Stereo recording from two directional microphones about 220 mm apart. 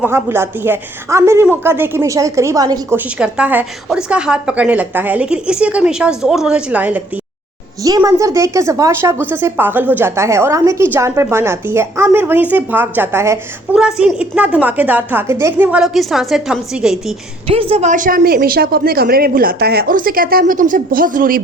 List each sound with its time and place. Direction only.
0.0 s a woman's voice: 10° right (ahead or behind)
3.2 s a woman's voice: 5° right (ahead or behind)
17.5 s speech: 25° right (ahead or behind)